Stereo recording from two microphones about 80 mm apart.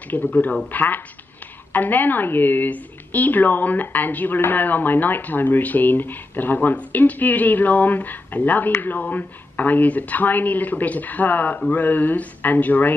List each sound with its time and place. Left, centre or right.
0.1 s a woman's voice: left